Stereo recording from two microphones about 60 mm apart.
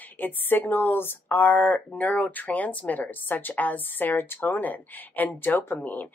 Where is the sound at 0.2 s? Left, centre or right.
Left.